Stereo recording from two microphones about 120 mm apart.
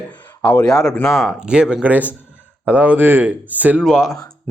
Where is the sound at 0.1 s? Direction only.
15° left (ahead or behind).